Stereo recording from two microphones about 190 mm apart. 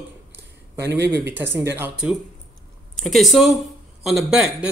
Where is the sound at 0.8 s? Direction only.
65° right (ahead or behind).